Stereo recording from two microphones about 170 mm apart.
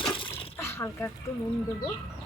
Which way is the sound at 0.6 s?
15° left (ahead or behind).